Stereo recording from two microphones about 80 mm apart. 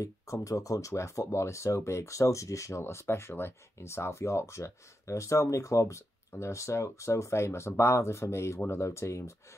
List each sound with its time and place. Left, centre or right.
0.0 s speech: left